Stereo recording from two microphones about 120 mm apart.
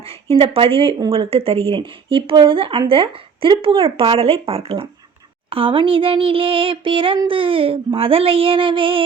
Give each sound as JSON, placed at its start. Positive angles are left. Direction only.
{"t": 0.0, "sound": "speech", "side_deg": -50}